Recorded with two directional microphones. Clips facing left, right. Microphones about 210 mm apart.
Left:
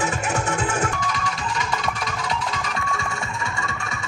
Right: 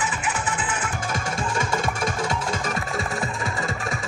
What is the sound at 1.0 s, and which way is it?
Music, 50° right (ahead or behind).